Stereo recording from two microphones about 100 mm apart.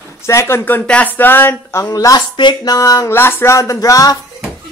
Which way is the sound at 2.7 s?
35° left (ahead or behind).